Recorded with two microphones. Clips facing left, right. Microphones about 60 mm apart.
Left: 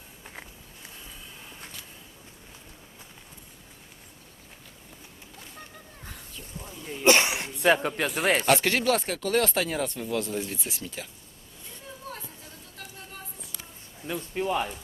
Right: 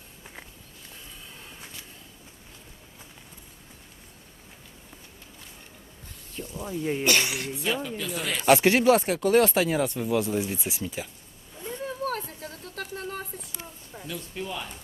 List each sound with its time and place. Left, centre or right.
6.7 s speech: right
7.0 s speech: left
7.6 s speech: left
8.4 s speech: centre
12.0 s a sound: right
12.7 s a sound: right
14.1 s speech: left